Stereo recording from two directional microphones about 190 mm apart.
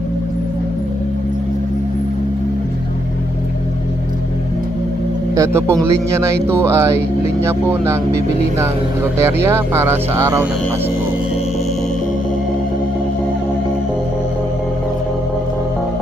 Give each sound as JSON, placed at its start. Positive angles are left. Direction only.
{"t": 5.3, "sound": "speech", "side_deg": -15}